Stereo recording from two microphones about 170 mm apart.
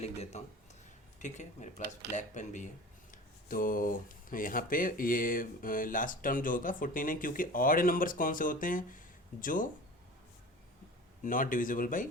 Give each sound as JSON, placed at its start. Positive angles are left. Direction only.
{"t": 0.0, "sound": "a sound", "side_deg": 40}
{"t": 1.2, "sound": "speech", "side_deg": 45}
{"t": 11.2, "sound": "speech", "side_deg": 50}